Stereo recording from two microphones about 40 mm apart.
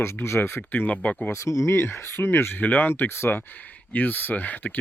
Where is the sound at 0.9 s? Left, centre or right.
Left.